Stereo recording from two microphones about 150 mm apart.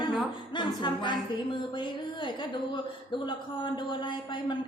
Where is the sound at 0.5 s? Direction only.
30° left (ahead or behind).